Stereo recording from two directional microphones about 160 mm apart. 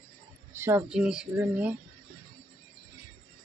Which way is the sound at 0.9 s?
5° right (ahead or behind).